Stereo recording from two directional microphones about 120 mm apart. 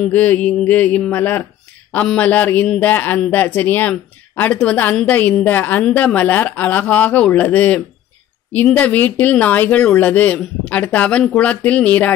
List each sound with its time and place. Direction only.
0.0 s a woman's voice: 15° left (ahead or behind)